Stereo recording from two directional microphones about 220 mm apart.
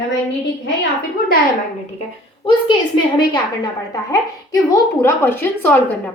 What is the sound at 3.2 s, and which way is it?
A woman's voice, 20° left (ahead or behind).